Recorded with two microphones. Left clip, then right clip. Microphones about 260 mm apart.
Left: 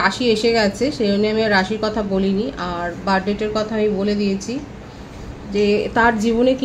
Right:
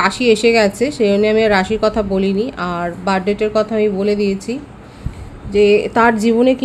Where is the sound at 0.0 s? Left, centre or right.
Right.